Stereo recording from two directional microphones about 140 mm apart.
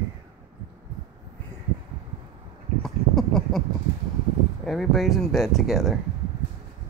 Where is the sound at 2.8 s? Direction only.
Centre (ahead or behind).